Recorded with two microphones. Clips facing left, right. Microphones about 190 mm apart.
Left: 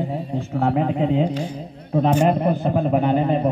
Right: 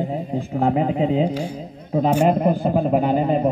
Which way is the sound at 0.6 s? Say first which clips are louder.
Right 1 dB; 15° right (ahead or behind).